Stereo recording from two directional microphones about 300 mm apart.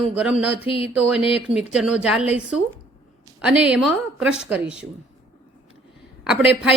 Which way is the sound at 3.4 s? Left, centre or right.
Centre.